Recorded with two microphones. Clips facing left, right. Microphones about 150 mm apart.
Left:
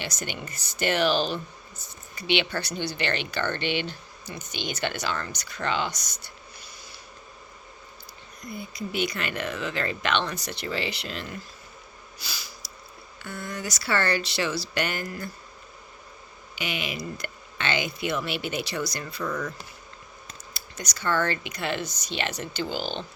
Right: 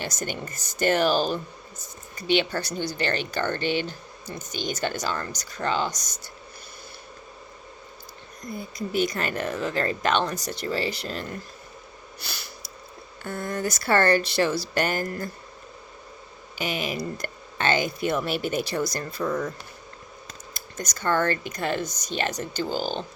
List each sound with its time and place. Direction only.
0.0 s speech: 45° right (ahead or behind)
8.4 s speech: 40° right (ahead or behind)
12.2 s a sound: 60° right (ahead or behind)
13.2 s speech: 45° right (ahead or behind)
16.6 s speech: 40° right (ahead or behind)
19.2 s speech: 30° right (ahead or behind)
20.5 s speech: 50° right (ahead or behind)